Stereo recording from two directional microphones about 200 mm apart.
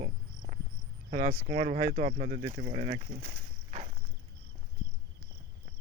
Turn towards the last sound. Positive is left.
turn(degrees=-35)  # may be behind; listen again after turning